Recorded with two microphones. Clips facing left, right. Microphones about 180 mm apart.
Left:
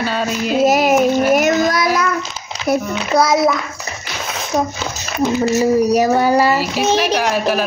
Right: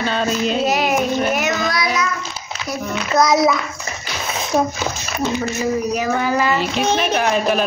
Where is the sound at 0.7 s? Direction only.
40° left (ahead or behind).